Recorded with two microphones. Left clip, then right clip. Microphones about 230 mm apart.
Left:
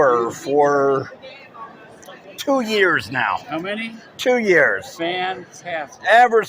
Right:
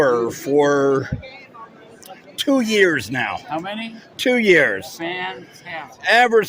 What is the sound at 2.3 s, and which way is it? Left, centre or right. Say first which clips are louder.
Speech: right 1 dB; right.